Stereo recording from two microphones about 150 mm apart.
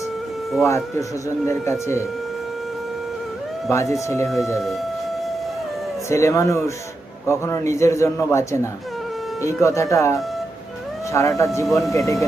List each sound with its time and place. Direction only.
0.6 s a man's voice: 20° left (ahead or behind)
3.7 s a man's voice: 20° left (ahead or behind)
6.1 s a man's voice: 20° left (ahead or behind)